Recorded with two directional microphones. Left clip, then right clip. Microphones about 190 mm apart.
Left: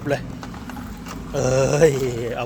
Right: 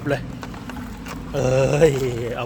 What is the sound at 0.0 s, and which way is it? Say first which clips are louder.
Speech: even; 20° right (ahead or behind).